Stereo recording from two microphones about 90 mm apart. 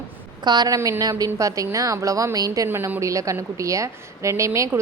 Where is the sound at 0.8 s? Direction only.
40° right (ahead or behind).